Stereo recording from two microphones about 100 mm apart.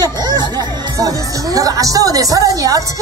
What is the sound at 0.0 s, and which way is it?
Speech, 45° right (ahead or behind).